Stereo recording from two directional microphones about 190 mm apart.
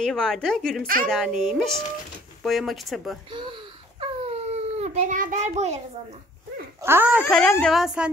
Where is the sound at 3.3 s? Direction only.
25° right (ahead or behind).